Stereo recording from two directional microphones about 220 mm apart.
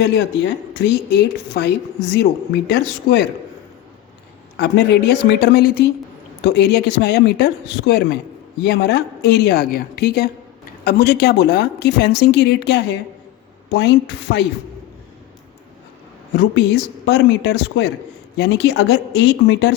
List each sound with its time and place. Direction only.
0.7 s a woman's voice: 50° left (ahead or behind)
4.5 s a woman's voice: 50° left (ahead or behind)
16.4 s a woman's voice: 50° left (ahead or behind)